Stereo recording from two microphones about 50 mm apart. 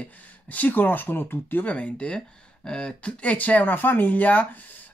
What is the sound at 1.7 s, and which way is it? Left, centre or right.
Speech, left.